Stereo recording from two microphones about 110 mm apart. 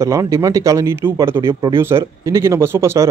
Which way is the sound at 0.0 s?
30° right (ahead or behind).